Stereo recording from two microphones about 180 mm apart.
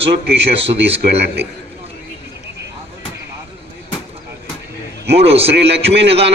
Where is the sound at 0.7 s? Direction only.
65° right (ahead or behind).